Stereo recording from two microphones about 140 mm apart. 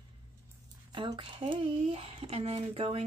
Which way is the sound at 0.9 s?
35° right (ahead or behind).